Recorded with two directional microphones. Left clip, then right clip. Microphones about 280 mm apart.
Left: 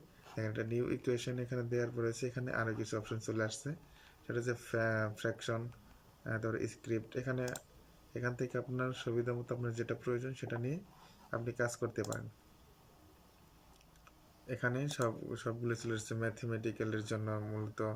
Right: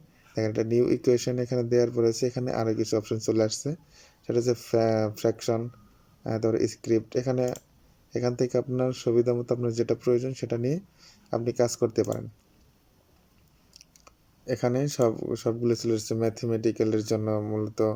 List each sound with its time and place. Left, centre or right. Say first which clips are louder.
0.3 s speech: right 14 dB; right
13.7 s speech: right 14 dB; right